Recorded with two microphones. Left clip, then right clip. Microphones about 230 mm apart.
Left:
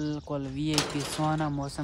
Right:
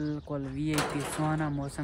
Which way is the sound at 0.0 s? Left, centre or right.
Centre.